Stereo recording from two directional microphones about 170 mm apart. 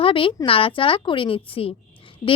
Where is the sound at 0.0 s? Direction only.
30° left (ahead or behind).